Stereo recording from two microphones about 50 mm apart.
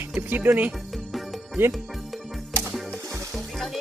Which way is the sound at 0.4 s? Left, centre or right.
Right.